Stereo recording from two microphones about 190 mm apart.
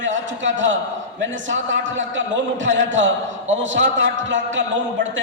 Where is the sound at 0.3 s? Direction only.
75° right (ahead or behind).